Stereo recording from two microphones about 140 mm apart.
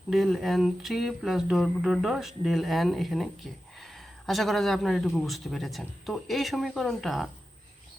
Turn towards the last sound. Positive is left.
turn(degrees=0)  # may be behind; listen again after turning